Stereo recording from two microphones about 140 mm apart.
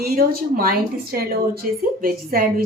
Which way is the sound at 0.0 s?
90° right.